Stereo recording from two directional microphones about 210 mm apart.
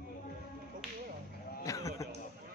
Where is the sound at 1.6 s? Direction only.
15° left (ahead or behind).